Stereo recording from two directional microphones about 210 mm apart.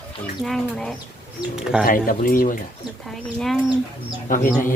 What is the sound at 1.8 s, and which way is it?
Speech, 40° left (ahead or behind).